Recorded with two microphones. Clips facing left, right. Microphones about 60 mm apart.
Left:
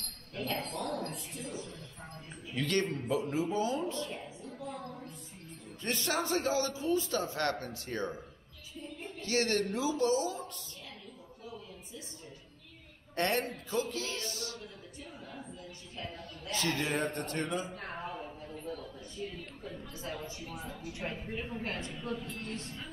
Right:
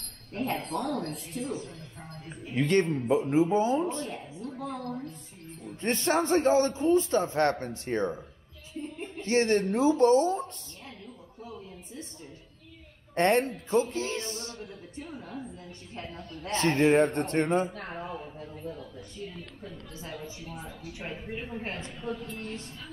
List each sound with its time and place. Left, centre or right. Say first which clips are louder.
0.3 s a sound: right 6 dB; right
1.4 s a man's voice: right 8 dB; right
4.5 s a sound: right 7 dB; right
5.8 s a man's voice: right 7 dB; right
13.1 s a man's voice: right 8 dB; right
18.0 s a man's voice: right 3 dB; right
21.0 s speech: right 2 dB; centre
21.6 s a man's voice: right 1 dB; right
22.1 s speech: right 1 dB; centre
22.4 s a man's voice: right 2 dB; right